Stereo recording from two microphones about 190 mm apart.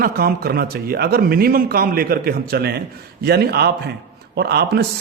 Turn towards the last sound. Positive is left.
turn(degrees=-55)  # may be behind; listen again after turning